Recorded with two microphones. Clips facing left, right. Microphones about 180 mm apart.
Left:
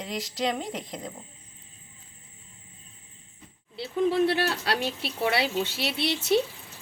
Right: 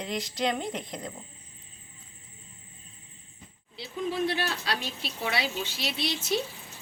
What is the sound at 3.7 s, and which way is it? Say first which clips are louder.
Speech: left 7 dB; 60° left (ahead or behind).